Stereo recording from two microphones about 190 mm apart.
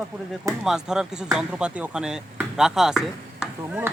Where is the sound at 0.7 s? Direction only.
5° right (ahead or behind).